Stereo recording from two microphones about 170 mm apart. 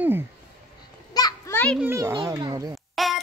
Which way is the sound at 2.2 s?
25° right (ahead or behind).